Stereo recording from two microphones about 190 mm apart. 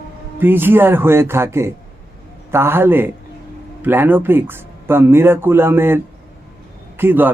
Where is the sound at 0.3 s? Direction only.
10° right (ahead or behind).